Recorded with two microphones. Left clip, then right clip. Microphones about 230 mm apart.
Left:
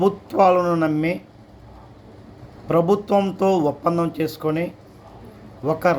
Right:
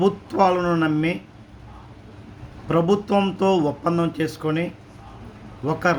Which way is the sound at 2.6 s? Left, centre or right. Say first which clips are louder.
Left 2 dB; centre.